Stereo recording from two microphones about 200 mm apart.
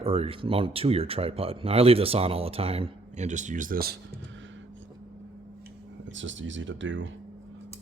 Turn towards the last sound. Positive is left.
turn(degrees=-70)  # may be behind; listen again after turning